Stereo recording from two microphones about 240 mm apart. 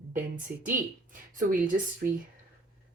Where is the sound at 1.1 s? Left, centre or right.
Right.